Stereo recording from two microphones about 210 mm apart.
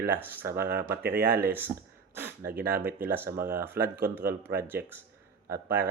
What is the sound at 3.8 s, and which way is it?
Speech, 45° right (ahead or behind).